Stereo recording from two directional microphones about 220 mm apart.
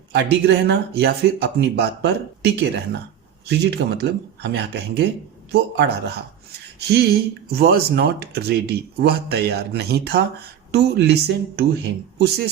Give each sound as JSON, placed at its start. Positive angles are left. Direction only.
{"t": 0.1, "sound": "speech", "side_deg": -50}